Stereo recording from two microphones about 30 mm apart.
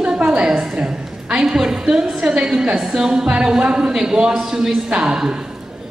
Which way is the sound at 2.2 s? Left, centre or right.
Right.